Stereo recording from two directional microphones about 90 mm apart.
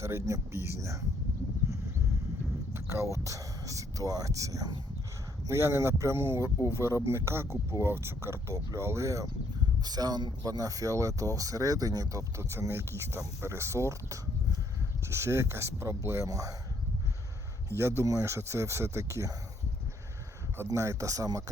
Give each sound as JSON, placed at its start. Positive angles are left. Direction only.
{"t": 0.0, "sound": "speech", "side_deg": -30}
{"t": 2.7, "sound": "speech", "side_deg": -25}
{"t": 9.8, "sound": "speech", "side_deg": -50}
{"t": 17.7, "sound": "speech", "side_deg": -30}
{"t": 20.7, "sound": "speech", "side_deg": -35}